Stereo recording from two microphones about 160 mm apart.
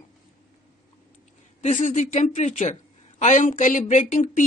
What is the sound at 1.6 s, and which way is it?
A woman's voice, 45° left (ahead or behind).